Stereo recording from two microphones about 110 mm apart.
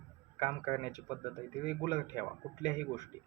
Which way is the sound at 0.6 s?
30° left (ahead or behind).